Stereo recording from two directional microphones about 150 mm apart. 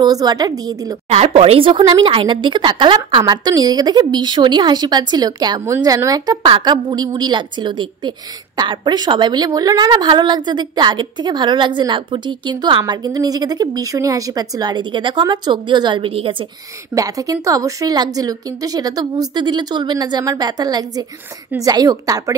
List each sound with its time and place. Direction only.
0.0 s a woman's voice: 25° right (ahead or behind)
1.1 s a woman's voice: 45° right (ahead or behind)
16.9 s a woman's voice: 25° right (ahead or behind)